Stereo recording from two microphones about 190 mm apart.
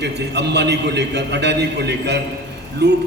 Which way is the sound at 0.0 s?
60° right (ahead or behind).